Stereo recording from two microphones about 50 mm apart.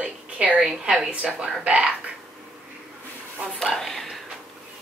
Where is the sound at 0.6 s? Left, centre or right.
Centre.